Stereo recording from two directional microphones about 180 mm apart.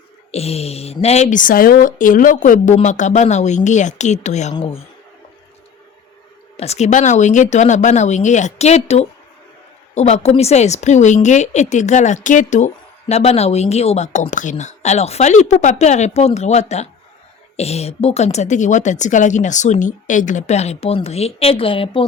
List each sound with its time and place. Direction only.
0.3 s a woman's voice: 35° left (ahead or behind)
6.6 s a woman's voice: 40° left (ahead or behind)